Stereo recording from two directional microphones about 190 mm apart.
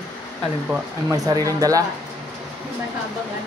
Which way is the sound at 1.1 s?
15° right (ahead or behind).